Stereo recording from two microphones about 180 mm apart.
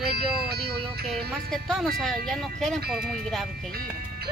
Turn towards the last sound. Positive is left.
turn(degrees=0)  # may be behind; listen again after turning